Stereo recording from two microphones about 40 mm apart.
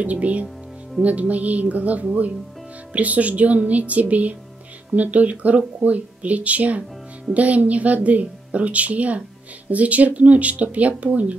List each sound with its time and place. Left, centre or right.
0.0 s speech: right